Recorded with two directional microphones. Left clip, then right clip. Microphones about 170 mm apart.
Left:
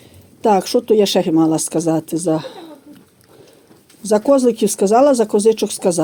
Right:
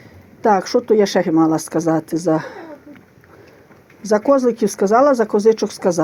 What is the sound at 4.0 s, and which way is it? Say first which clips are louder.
Speech: left 1 dB; 30° left (ahead or behind).